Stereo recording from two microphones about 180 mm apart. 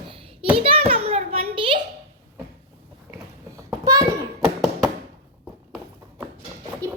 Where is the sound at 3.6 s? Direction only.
20° right (ahead or behind).